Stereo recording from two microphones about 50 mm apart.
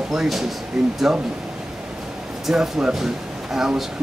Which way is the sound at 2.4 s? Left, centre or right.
Centre.